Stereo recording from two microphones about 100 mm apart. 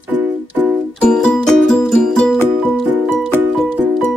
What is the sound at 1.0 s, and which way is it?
Music, 5° left (ahead or behind).